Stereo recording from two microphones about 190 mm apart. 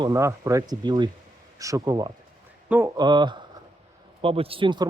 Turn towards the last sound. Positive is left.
turn(degrees=-25)  # may be behind; listen again after turning